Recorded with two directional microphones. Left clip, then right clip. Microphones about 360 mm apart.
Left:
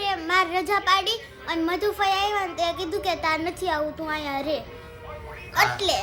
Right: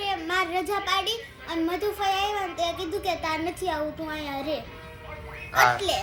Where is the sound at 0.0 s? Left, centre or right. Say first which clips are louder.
Left 4 dB; centre.